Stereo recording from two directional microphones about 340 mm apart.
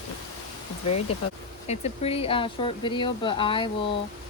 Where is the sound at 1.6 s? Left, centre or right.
Centre.